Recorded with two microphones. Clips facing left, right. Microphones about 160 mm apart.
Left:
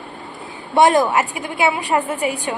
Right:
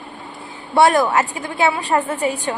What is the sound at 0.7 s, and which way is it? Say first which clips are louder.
A woman's voice: even; 15° left (ahead or behind).